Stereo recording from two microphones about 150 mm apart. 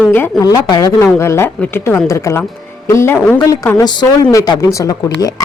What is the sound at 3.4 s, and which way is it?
Speech, 25° left (ahead or behind).